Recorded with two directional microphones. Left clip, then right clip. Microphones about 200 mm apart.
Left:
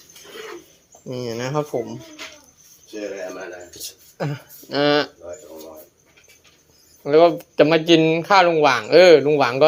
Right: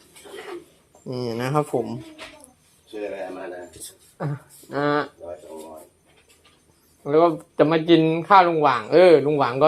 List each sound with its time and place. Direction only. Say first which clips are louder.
1.0 s speech: even; centre (ahead or behind)
4.2 s speech: left 4 dB; 20° left (ahead or behind)
7.0 s speech: left 4 dB; 15° left (ahead or behind)